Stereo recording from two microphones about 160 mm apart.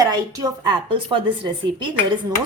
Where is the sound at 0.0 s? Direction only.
25° right (ahead or behind).